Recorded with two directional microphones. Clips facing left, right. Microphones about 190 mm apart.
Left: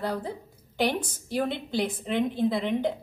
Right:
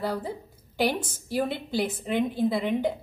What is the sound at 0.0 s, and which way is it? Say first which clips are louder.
A woman's voice: right 1 dB; 5° right (ahead or behind).